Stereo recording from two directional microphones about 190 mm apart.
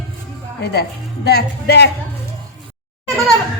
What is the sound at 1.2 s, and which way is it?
Speech, 60° left (ahead or behind).